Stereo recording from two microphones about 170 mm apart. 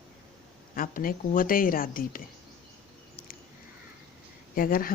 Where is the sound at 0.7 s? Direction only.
55° left (ahead or behind).